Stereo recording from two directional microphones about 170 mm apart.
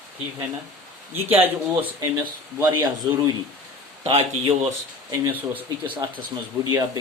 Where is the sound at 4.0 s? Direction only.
35° right (ahead or behind).